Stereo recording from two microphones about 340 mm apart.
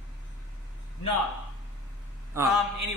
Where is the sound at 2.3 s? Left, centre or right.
Centre.